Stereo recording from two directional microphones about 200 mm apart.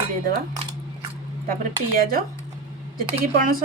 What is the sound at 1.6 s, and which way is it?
Speech, 45° right (ahead or behind).